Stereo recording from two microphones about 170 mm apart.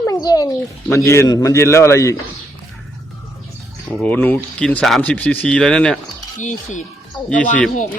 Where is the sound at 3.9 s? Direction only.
10° left (ahead or behind).